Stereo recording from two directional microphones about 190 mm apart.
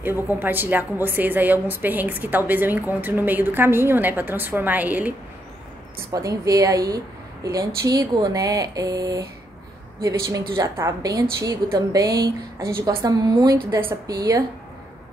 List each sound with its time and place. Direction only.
0.3 s a woman's voice: 10° right (ahead or behind)
6.1 s speech: 20° right (ahead or behind)
10.5 s a woman's voice: 15° right (ahead or behind)